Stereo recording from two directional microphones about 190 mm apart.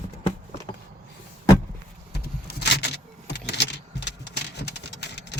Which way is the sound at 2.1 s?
55° left (ahead or behind).